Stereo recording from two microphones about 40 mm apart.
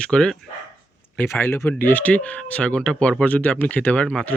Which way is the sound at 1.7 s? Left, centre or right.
Left.